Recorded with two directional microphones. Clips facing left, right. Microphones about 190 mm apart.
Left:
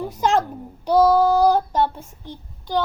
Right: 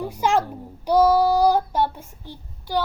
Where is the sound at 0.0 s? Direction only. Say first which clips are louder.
Left 1 dB; 15° right (ahead or behind).